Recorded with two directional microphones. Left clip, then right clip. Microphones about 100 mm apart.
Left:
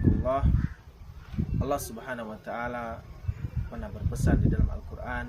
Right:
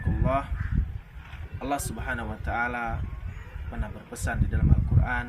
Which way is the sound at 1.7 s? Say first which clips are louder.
Right 2 dB; 35° left (ahead or behind).